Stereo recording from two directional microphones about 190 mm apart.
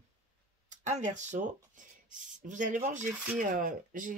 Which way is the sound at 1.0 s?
40° right (ahead or behind).